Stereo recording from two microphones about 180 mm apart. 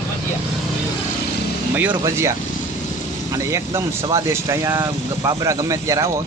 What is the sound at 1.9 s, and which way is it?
Speech, 15° right (ahead or behind).